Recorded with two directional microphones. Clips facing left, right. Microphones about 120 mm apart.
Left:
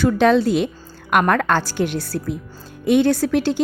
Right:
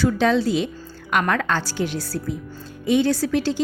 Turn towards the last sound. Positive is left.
turn(degrees=55)  # may be behind; listen again after turning